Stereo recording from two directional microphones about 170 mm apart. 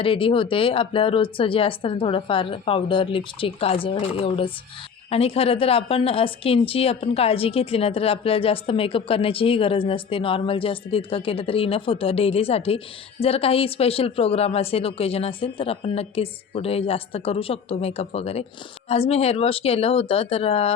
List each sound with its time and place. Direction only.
0.0 s a woman's voice: 30° left (ahead or behind)